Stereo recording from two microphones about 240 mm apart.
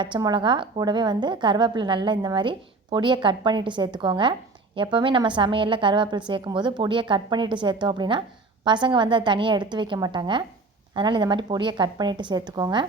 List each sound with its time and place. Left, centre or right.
0.0 s a woman's voice: centre